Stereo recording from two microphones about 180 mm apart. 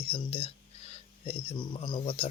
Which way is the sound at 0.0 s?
30° left (ahead or behind).